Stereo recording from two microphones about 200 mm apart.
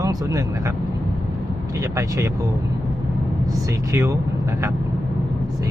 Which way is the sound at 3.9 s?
15° right (ahead or behind).